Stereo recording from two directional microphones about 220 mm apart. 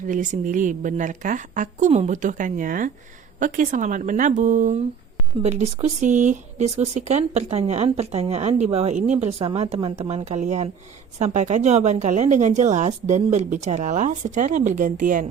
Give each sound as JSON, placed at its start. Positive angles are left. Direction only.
{"t": 0.1, "sound": "a woman's voice", "side_deg": -35}